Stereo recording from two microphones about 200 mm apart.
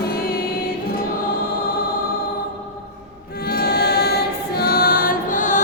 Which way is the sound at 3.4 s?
50° left (ahead or behind).